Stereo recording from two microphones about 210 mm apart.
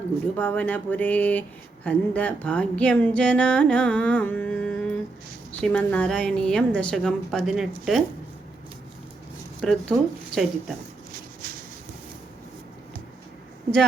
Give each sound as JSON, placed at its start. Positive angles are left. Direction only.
{"t": 0.3, "sound": "a woman's voice", "side_deg": 10}
{"t": 9.6, "sound": "a woman's voice", "side_deg": 0}
{"t": 11.1, "sound": "a sound", "side_deg": -40}